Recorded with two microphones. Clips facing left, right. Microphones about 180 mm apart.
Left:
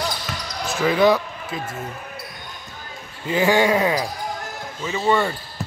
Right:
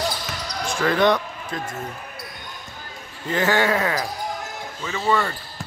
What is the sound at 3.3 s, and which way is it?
Speech, 10° left (ahead or behind).